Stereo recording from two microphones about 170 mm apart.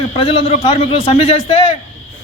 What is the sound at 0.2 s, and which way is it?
A man's voice, 35° left (ahead or behind).